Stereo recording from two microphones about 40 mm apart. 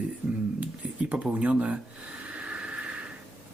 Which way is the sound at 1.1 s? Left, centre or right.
Right.